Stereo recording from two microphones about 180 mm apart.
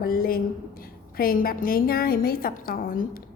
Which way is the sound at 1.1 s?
55° left (ahead or behind).